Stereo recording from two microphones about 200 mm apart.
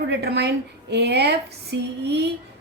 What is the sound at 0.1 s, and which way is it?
A woman's voice, 55° right (ahead or behind).